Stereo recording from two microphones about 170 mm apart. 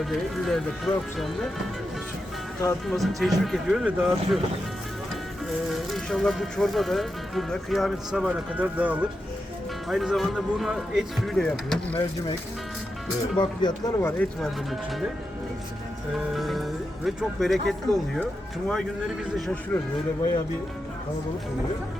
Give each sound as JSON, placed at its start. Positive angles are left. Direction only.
{"t": 0.0, "sound": "speech", "side_deg": 0}
{"t": 2.9, "sound": "speech", "side_deg": 0}
{"t": 5.7, "sound": "speech", "side_deg": 0}
{"t": 13.3, "sound": "speech", "side_deg": 25}
{"t": 14.2, "sound": "speech", "side_deg": 0}
{"t": 16.3, "sound": "speech", "side_deg": 0}